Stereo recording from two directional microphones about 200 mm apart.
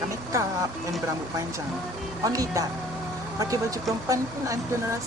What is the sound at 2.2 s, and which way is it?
Speech, 15° right (ahead or behind).